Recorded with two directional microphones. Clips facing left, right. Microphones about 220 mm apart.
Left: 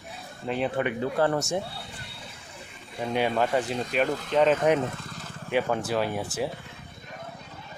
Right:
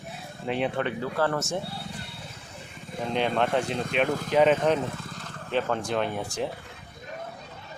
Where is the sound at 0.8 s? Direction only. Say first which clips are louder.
Left 2 dB; 15° left (ahead or behind).